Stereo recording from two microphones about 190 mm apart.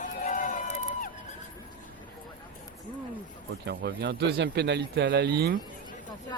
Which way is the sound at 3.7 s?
60° right (ahead or behind).